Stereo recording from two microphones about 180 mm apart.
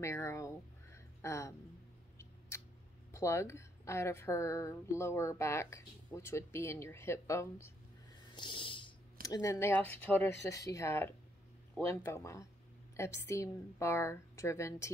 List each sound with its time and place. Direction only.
0.0 s a woman's voice: 15° left (ahead or behind)
0.9 s a sound: 15° left (ahead or behind)
3.1 s a woman's voice: 15° left (ahead or behind)
8.4 s a woman's voice: 25° left (ahead or behind)